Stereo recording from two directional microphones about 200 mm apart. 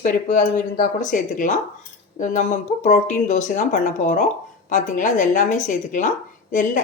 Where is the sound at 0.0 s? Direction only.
40° left (ahead or behind).